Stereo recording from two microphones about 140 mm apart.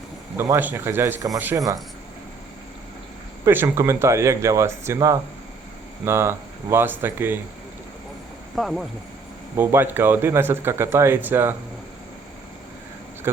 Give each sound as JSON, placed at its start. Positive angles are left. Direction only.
{"t": 0.3, "sound": "speech", "side_deg": -20}
{"t": 3.4, "sound": "speech", "side_deg": -20}
{"t": 8.5, "sound": "speech", "side_deg": 0}
{"t": 9.6, "sound": "speech", "side_deg": -15}
{"t": 13.3, "sound": "speech", "side_deg": -15}